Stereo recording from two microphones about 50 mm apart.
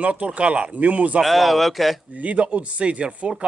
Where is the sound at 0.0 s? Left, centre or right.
Right.